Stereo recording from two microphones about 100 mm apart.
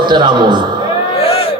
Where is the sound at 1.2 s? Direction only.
80° left.